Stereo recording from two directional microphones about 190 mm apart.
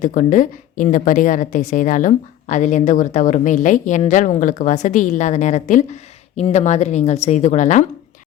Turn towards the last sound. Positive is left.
turn(degrees=40)  # may be behind; listen again after turning